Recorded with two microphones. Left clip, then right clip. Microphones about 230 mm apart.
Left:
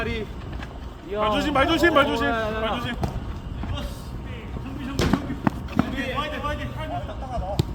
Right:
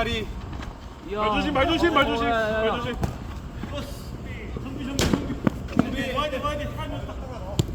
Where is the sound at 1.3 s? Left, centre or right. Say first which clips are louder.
Left 2 dB; left.